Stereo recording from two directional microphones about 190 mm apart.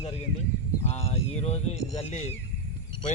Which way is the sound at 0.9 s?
35° left (ahead or behind).